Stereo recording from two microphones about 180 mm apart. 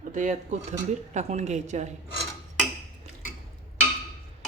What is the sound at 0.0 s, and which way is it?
A woman's voice, 45° right (ahead or behind).